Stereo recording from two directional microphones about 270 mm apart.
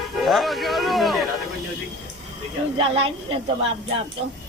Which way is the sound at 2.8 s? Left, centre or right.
Right.